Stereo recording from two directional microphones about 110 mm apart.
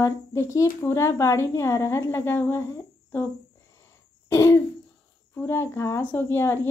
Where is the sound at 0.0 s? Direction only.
25° left (ahead or behind).